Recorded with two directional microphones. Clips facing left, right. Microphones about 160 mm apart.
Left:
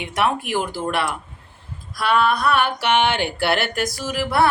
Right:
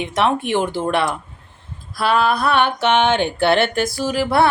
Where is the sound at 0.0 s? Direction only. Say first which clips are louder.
Right 3 dB; 25° right (ahead or behind).